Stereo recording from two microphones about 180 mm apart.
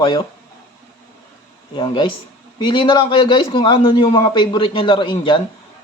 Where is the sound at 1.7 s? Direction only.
30° left (ahead or behind).